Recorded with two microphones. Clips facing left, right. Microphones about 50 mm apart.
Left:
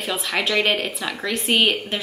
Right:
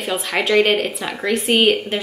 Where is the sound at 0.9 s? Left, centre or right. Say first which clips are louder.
Right 4 dB; right.